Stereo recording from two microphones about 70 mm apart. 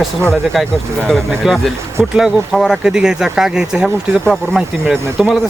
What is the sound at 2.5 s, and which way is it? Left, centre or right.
Speech, centre.